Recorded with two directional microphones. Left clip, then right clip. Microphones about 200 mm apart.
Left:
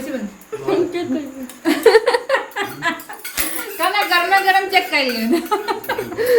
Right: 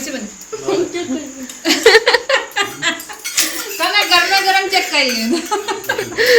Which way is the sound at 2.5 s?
50° left (ahead or behind).